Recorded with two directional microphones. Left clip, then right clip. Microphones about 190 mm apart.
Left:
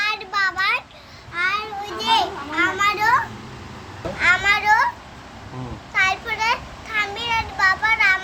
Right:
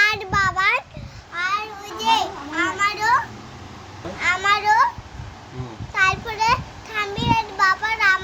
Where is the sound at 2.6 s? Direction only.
5° right (ahead or behind).